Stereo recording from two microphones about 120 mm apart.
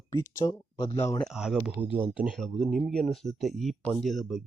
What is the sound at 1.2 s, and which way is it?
Speech, 5° right (ahead or behind).